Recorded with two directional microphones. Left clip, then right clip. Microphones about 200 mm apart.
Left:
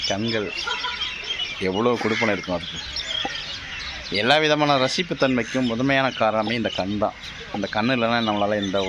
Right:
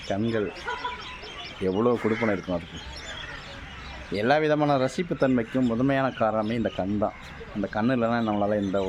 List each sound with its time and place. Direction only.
0.1 s speech: 5° left (ahead or behind)
1.6 s speech: centre (ahead or behind)
4.1 s speech: centre (ahead or behind)
6.7 s speech: 15° left (ahead or behind)
7.7 s speech: centre (ahead or behind)